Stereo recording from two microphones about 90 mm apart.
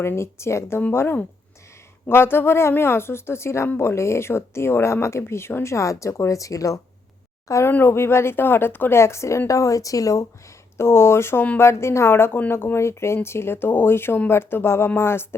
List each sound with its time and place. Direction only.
0.0 s speech: 30° left (ahead or behind)